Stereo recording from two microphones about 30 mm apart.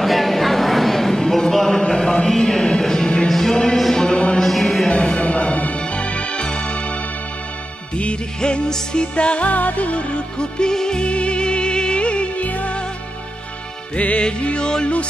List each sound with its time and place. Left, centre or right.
0.0 s a sound: centre
1.8 s a sound: left
2.8 s music: centre
3.7 s a sound: centre
5.2 s music: left
9.5 s music: left
10.1 s music: left
11.0 s music: left
12.4 s music: left
13.9 s music: left